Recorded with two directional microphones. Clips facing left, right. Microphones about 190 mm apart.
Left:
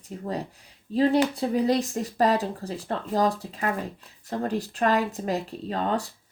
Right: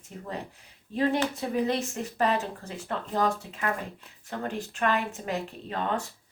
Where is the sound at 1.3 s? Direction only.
35° left (ahead or behind).